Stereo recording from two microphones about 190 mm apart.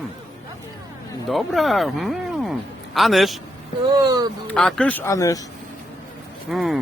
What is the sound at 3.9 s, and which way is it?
Speech, 20° right (ahead or behind).